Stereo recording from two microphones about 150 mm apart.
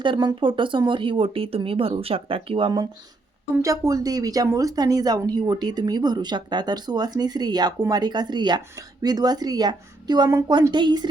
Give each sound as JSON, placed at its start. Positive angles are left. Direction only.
{"t": 0.0, "sound": "speech", "side_deg": -30}
{"t": 3.6, "sound": "speech", "side_deg": -20}